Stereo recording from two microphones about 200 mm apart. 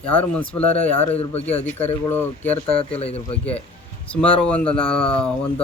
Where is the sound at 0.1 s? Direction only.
5° left (ahead or behind).